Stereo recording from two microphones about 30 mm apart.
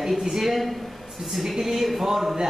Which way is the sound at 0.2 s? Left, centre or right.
Centre.